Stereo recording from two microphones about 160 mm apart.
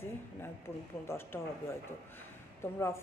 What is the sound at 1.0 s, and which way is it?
Speech, 15° left (ahead or behind).